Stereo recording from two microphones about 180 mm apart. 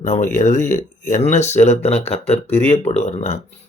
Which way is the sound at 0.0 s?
45° left (ahead or behind).